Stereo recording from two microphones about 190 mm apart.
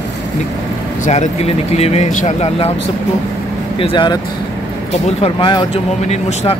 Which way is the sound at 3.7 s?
25° left (ahead or behind).